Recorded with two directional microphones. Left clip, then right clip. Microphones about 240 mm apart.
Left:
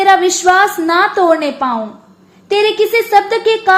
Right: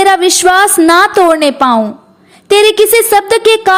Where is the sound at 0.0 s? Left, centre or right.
Right.